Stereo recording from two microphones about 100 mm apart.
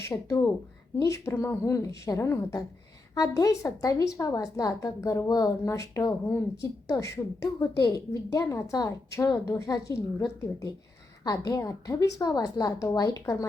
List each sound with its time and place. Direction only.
0.0 s a woman's voice: 30° left (ahead or behind)